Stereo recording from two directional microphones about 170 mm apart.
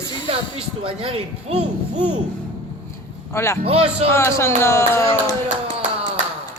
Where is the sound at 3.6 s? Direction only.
35° right (ahead or behind).